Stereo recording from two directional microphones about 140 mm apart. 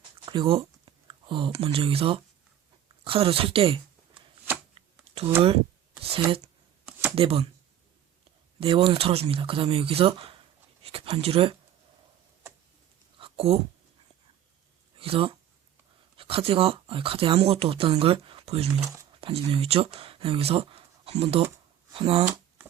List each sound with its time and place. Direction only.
0.3 s speech: 35° right (ahead or behind)
5.1 s a sound: 45° right (ahead or behind)
6.0 s speech: 45° right (ahead or behind)
8.6 s speech: 40° right (ahead or behind)
13.1 s a sound: 40° right (ahead or behind)
14.9 s speech: 40° right (ahead or behind)